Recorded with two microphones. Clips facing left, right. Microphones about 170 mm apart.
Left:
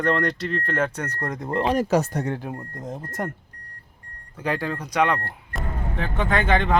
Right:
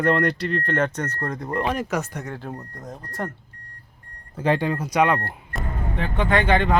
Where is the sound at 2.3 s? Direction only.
15° left (ahead or behind).